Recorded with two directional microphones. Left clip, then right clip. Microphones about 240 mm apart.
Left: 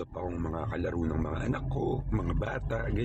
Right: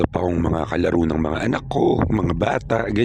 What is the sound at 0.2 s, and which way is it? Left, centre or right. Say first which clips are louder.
A man's voice: right 13 dB; right.